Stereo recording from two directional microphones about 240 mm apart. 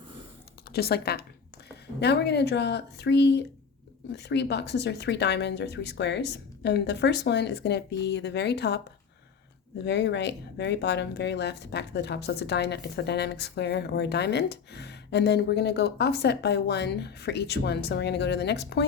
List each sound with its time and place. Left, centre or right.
0.7 s speech: left
9.8 s speech: left